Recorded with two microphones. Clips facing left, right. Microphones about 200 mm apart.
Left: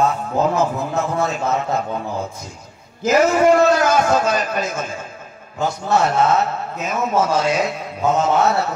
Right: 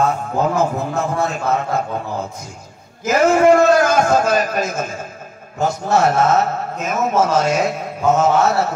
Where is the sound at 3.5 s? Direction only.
50° right (ahead or behind).